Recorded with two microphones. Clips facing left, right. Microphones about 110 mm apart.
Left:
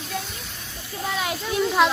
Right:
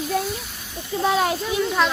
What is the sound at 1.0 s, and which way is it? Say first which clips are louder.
Speech: right 8 dB; 70° right (ahead or behind).